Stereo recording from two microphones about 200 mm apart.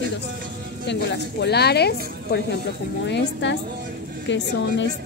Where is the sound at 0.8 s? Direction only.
55° left (ahead or behind).